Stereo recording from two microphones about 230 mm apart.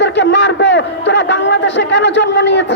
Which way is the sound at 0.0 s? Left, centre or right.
Left.